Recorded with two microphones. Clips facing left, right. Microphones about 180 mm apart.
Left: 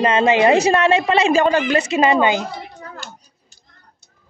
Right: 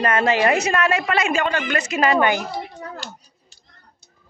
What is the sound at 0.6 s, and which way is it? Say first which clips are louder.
A woman's voice: left 6 dB; 30° left (ahead or behind).